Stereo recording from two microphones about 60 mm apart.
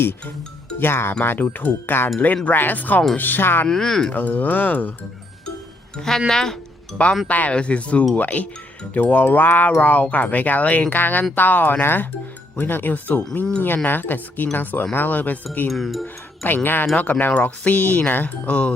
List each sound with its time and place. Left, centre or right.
0.0 s speech: left
3.7 s speech: centre
4.1 s speech: left
6.0 s speech: centre
7.3 s speech: left
15.7 s speech: centre
16.6 s speech: left